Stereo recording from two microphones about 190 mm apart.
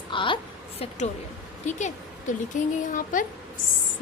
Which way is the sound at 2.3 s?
40° left (ahead or behind).